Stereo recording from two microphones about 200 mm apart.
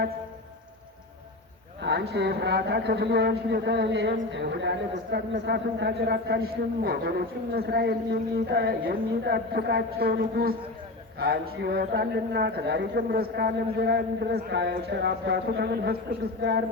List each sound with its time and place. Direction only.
1.8 s a man's voice: 60° right (ahead or behind)